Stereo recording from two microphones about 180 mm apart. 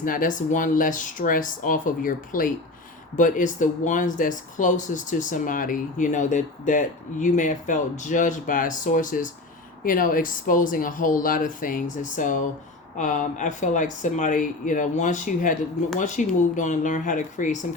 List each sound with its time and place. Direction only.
0.0 s speech: 50° left (ahead or behind)